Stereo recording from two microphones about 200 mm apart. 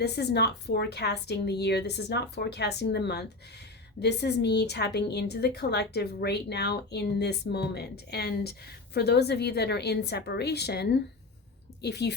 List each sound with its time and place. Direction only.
0.0 s a woman's voice: 55° left (ahead or behind)